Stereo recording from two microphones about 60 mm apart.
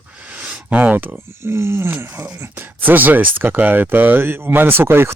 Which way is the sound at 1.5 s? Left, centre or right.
Right.